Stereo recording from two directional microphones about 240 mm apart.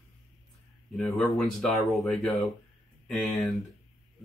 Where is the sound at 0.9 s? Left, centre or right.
Centre.